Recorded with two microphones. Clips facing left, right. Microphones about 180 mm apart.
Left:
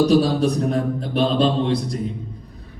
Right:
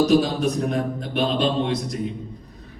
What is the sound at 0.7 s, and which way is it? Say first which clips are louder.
A man's voice: left 3 dB; 35° left (ahead or behind).